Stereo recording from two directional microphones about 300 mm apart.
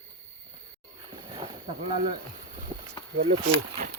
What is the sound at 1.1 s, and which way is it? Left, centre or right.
Boat, centre.